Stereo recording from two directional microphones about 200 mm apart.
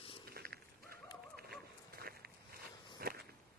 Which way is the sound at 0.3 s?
50° right (ahead or behind).